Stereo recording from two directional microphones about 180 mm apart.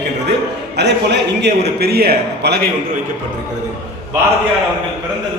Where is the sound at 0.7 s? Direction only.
70° right (ahead or behind).